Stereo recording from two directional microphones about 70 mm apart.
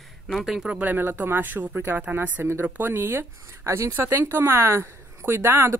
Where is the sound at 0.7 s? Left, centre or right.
Right.